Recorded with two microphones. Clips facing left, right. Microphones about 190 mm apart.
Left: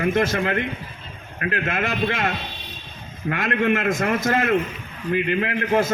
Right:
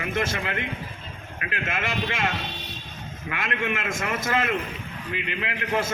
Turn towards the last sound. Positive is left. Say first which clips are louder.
# left 6 dB
turn(degrees=55)  # may be behind; listen again after turning